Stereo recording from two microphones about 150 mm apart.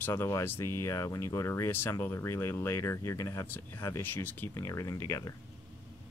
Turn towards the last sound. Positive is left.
turn(degrees=20)  # may be behind; listen again after turning